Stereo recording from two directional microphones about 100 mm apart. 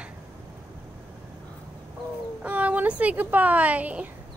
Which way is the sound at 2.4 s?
15° right (ahead or behind).